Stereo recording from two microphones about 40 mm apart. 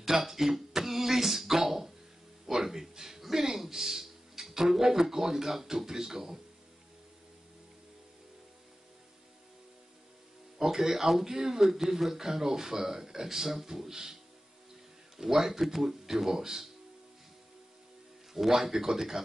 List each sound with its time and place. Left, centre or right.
0.0 s a sound: centre
1.6 s a man's voice: centre
10.6 s speech: centre
15.1 s speech: centre
18.3 s speech: centre